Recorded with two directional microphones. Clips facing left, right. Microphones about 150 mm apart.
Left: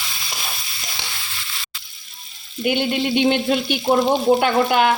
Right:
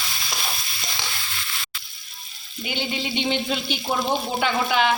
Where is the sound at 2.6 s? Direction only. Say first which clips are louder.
Left 9 dB; 55° left (ahead or behind).